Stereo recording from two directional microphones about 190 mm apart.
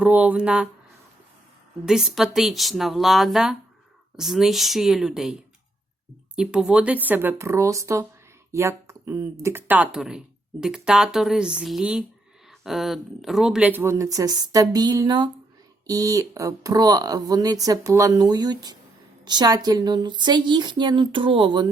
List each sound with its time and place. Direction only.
0.0 s speech: 5° right (ahead or behind)
1.8 s speech: 5° right (ahead or behind); by 21.7 s 25° right (ahead or behind)